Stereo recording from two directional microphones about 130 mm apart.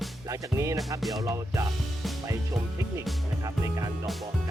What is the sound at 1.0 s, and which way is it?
Music, centre (ahead or behind).